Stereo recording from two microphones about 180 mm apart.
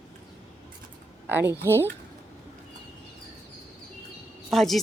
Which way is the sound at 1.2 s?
10° right (ahead or behind).